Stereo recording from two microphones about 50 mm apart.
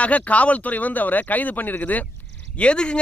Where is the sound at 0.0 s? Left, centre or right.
Left.